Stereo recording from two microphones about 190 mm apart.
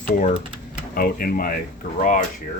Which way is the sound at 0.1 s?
45° left (ahead or behind).